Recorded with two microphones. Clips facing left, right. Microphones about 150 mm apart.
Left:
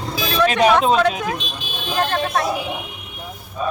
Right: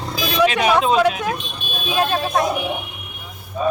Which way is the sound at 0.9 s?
5° right (ahead or behind).